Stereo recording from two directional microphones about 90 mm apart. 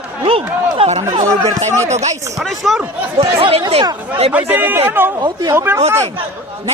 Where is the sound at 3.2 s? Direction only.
90° right.